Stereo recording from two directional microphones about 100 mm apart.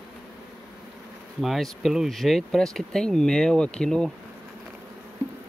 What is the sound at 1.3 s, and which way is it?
Speech, centre (ahead or behind).